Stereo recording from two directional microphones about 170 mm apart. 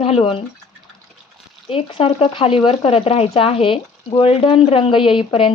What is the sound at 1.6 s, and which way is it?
Speech, 35° left (ahead or behind).